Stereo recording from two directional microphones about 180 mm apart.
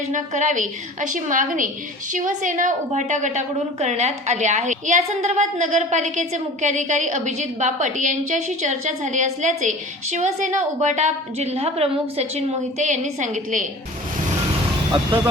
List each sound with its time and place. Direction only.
0.1 s a woman's voice: 45° right (ahead or behind)